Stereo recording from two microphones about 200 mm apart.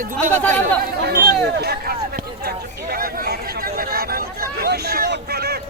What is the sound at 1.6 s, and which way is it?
A man's voice, 50° right (ahead or behind).